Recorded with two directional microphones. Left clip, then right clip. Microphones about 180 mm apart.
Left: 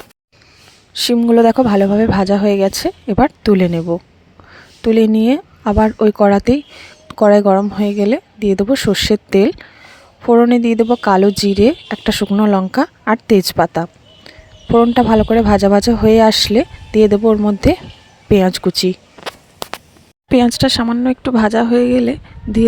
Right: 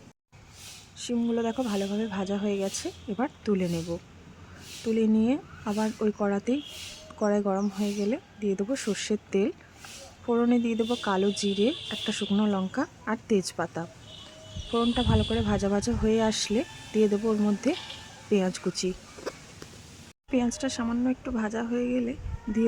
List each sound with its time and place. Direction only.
0.9 s speech: 55° left (ahead or behind)
18.3 s a sound: 45° left (ahead or behind)
20.3 s speech: 55° left (ahead or behind)